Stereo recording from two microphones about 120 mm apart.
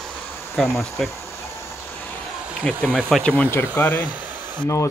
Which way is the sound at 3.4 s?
15° left (ahead or behind).